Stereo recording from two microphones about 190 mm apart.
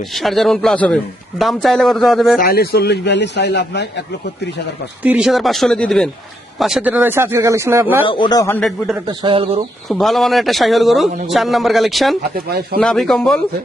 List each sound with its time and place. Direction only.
0.0 s a man's voice: centre (ahead or behind)
2.4 s speech: 55° left (ahead or behind)
5.0 s a man's voice: 5° right (ahead or behind)
8.0 s a man's voice: 25° left (ahead or behind); by 8.7 s 10° left (ahead or behind)
9.2 s speech: 30° right (ahead or behind)
9.9 s a man's voice: centre (ahead or behind)
12.5 s speech: 55° right (ahead or behind)
12.8 s a man's voice: centre (ahead or behind)